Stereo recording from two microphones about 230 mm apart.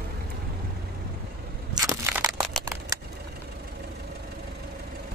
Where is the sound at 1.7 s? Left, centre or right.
Centre.